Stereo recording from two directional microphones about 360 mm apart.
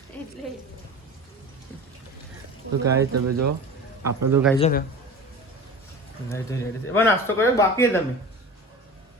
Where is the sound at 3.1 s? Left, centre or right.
Right.